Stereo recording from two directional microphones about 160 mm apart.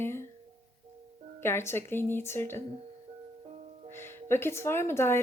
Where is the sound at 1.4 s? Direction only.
15° left (ahead or behind).